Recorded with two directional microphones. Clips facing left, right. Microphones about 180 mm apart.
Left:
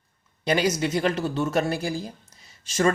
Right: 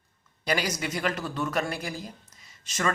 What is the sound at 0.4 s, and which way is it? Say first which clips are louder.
Speech: left 6 dB; 25° left (ahead or behind).